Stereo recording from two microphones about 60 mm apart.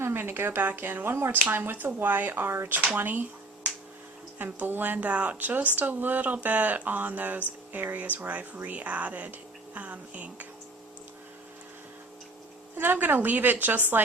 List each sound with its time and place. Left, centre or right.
0.0 s speech: right
3.0 s a sound: right
4.4 s speech: right
12.7 s speech: right